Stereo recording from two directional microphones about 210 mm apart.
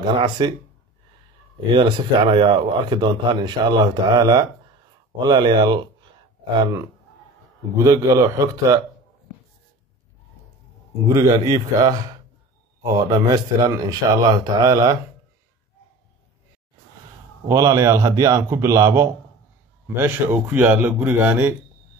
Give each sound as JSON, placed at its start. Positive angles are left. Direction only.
{"t": 0.0, "sound": "a man's voice", "side_deg": -25}
{"t": 1.8, "sound": "a man's voice", "side_deg": -25}
{"t": 7.7, "sound": "speech", "side_deg": -15}
{"t": 11.1, "sound": "speech", "side_deg": -15}
{"t": 17.5, "sound": "speech", "side_deg": -20}